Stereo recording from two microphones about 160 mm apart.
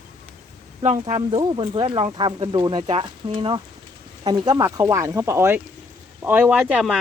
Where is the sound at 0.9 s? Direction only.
30° right (ahead or behind).